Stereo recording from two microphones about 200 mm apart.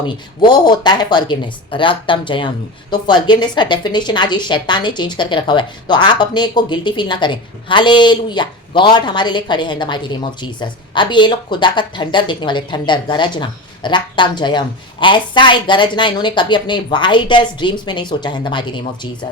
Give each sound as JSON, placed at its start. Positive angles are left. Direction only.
{"t": 0.0, "sound": "a woman's voice", "side_deg": 20}